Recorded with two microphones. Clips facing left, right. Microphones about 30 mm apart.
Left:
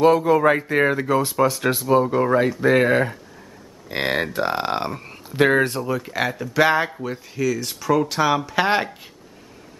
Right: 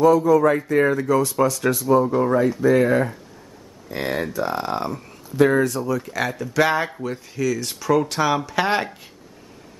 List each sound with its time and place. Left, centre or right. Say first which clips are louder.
0.0 s speech: right 1 dB; left
2.6 s speech: even; left
5.9 s speech: even; left